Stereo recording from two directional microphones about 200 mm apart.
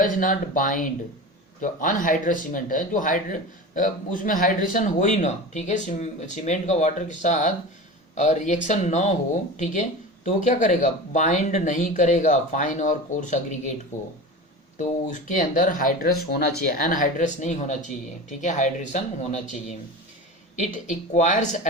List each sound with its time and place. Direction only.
0.0 s speech: 40° left (ahead or behind)
10.2 s speech: 40° left (ahead or behind)
14.8 s speech: 40° left (ahead or behind)
20.7 s speech: 35° left (ahead or behind)